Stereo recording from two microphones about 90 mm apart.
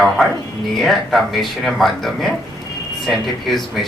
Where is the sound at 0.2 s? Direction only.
Centre (ahead or behind).